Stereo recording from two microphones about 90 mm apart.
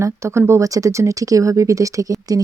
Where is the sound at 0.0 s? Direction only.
30° right (ahead or behind).